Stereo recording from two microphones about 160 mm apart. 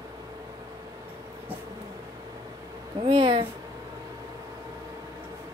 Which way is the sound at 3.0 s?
35° right (ahead or behind).